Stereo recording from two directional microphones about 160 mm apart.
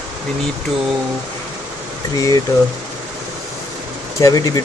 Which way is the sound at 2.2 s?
20° left (ahead or behind).